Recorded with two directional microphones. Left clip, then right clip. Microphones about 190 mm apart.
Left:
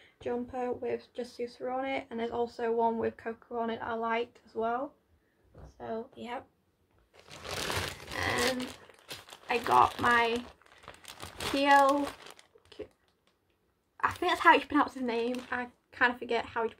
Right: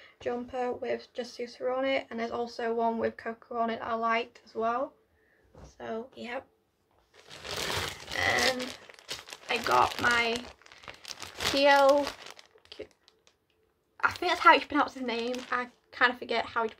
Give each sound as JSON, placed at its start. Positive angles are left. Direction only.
{"t": 0.2, "sound": "speech", "side_deg": -5}
{"t": 8.2, "sound": "a sound", "side_deg": -5}
{"t": 9.0, "sound": "crumpling", "side_deg": 0}
{"t": 10.0, "sound": "speech", "side_deg": 5}
{"t": 10.4, "sound": "crumpling", "side_deg": -20}
{"t": 11.5, "sound": "speech", "side_deg": 0}
{"t": 14.2, "sound": "speech", "side_deg": 5}